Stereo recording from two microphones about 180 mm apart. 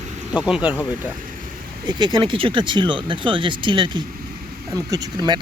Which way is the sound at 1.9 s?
25° right (ahead or behind).